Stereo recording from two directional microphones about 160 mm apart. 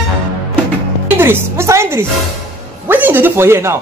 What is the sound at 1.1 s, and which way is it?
A woman's voice, 15° right (ahead or behind).